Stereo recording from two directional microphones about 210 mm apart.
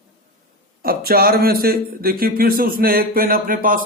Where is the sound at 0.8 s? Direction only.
45° right (ahead or behind).